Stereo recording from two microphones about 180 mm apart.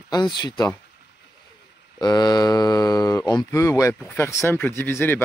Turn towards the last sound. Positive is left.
turn(degrees=15)  # may be behind; listen again after turning